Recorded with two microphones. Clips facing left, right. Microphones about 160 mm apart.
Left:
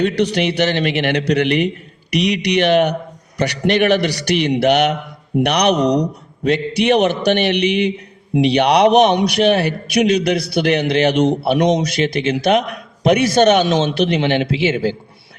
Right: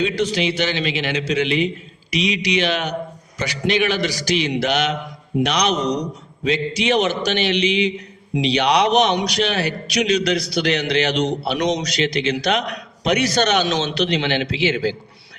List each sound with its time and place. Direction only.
0.0 s a man's voice: 65° left (ahead or behind)
14.4 s a man's voice: 25° left (ahead or behind)